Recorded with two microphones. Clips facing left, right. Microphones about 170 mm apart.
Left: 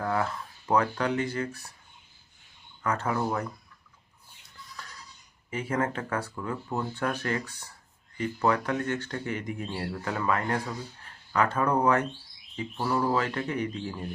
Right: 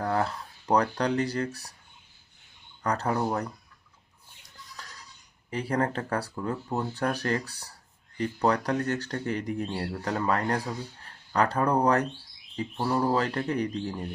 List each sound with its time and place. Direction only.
0.0 s speech: 35° right (ahead or behind)
2.8 s speech: 35° right (ahead or behind)
5.5 s speech: 35° right (ahead or behind)